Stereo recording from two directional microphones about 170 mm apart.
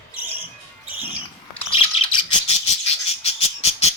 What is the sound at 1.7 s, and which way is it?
Bird, 35° left (ahead or behind).